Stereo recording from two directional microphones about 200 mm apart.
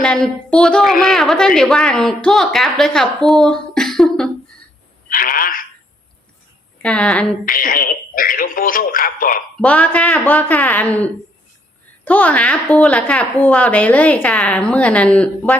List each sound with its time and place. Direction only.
0.0 s a woman's voice: 5° left (ahead or behind)
5.1 s speech: 45° left (ahead or behind)
6.8 s a woman's voice: 5° left (ahead or behind)
7.4 s speech: 45° left (ahead or behind)
9.6 s a woman's voice: 5° left (ahead or behind)